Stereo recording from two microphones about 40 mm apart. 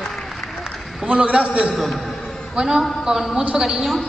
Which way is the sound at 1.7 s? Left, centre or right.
Centre.